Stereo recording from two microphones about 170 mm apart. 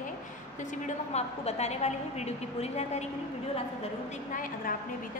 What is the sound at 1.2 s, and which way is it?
A woman's voice, 40° left (ahead or behind).